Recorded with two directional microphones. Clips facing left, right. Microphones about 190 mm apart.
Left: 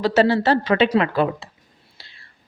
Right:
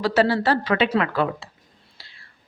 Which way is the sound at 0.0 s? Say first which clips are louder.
Left 3 dB; 25° left (ahead or behind).